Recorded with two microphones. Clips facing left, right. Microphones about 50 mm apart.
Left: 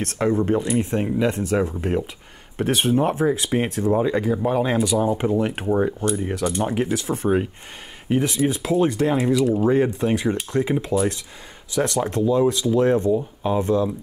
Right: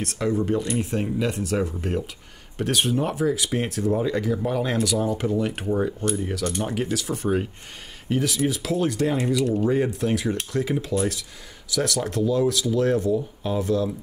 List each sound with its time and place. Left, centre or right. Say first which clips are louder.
0.0 s speech: left 3 dB; left
0.6 s speech: left 4 dB; centre
1.0 s speech: left 4 dB; left
6.4 s speech: left 6 dB; centre
9.2 s speech: left 3 dB; centre